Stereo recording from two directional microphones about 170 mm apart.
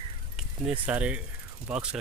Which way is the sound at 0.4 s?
5° right (ahead or behind).